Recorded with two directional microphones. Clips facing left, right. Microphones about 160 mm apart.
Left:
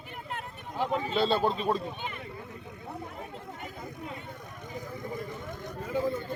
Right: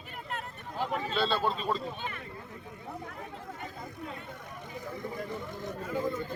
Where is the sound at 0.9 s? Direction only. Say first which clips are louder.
Left 4 dB; 15° left (ahead or behind).